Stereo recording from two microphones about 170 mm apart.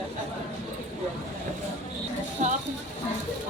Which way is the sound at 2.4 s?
45° right (ahead or behind).